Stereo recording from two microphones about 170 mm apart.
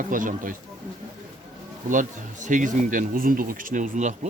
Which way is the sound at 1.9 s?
50° right (ahead or behind).